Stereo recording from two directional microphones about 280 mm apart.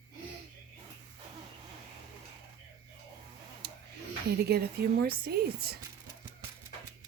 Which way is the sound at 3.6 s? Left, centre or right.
Right.